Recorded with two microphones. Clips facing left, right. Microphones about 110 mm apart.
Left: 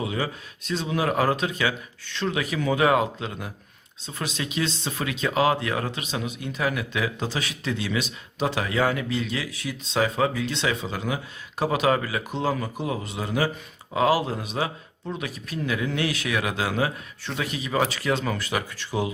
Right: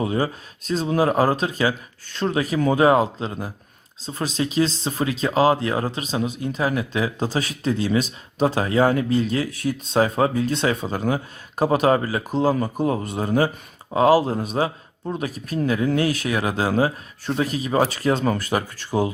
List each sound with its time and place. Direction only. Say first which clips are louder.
0.0 s speech: right 5 dB; 40° right (ahead or behind)